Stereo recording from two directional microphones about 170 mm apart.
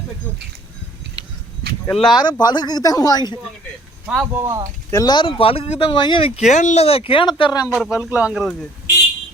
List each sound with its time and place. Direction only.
2.0 s speech: 30° left (ahead or behind)
4.0 s speech: centre (ahead or behind)
4.4 s speech: 20° right (ahead or behind)
4.9 s speech: 20° left (ahead or behind)
7.7 s speech: 5° right (ahead or behind)